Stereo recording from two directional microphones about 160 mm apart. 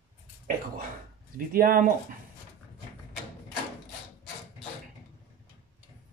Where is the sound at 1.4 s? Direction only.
60° right (ahead or behind).